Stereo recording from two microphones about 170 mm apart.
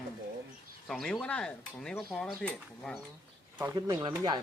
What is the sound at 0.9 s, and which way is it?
Speech, centre (ahead or behind).